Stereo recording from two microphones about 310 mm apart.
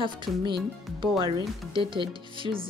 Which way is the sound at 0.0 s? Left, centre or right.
Centre.